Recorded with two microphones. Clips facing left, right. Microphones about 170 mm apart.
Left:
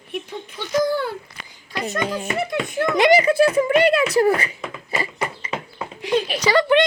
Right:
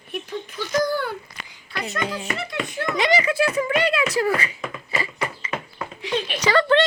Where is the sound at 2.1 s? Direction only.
50° left (ahead or behind).